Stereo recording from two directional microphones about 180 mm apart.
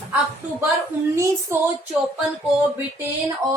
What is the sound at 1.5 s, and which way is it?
Speech, 15° right (ahead or behind).